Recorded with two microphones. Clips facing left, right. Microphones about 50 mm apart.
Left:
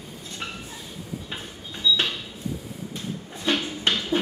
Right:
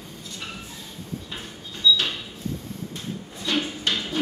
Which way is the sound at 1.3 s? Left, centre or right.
Centre.